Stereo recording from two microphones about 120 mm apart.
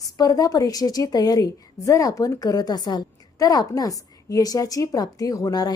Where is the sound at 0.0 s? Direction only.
30° left (ahead or behind).